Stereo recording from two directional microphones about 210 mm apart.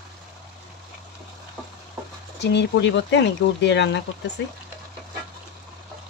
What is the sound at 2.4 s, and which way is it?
Speech, 55° left (ahead or behind).